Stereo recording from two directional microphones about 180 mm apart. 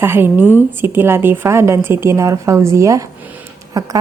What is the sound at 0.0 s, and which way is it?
A woman's voice, 10° right (ahead or behind).